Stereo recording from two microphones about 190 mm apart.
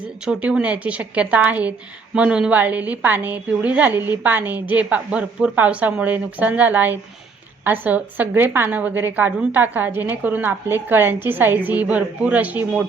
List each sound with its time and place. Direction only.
0.3 s a woman's voice: 5° right (ahead or behind)